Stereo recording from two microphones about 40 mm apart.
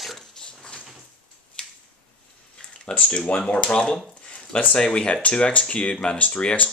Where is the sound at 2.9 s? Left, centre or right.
Left.